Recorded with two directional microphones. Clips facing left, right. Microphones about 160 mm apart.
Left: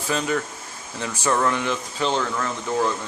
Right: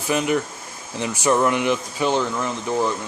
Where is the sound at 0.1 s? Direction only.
15° right (ahead or behind).